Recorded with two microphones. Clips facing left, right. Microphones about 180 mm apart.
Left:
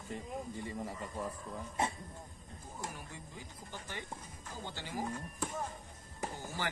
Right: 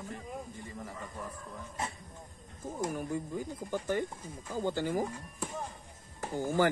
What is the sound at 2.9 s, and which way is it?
Speech, 50° right (ahead or behind).